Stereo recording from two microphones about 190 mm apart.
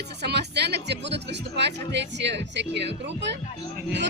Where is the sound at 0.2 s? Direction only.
60° right (ahead or behind).